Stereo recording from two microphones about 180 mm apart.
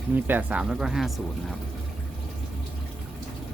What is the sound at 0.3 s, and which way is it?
Speech, 10° right (ahead or behind).